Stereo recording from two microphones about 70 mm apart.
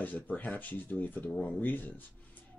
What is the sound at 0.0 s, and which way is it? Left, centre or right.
Speech, left.